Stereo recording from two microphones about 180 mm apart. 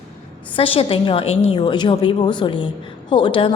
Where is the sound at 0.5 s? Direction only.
30° left (ahead or behind).